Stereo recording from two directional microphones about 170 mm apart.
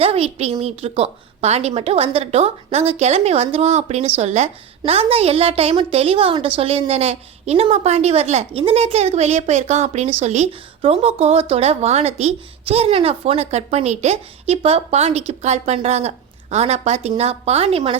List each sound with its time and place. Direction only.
0.0 s a woman's voice: 35° right (ahead or behind)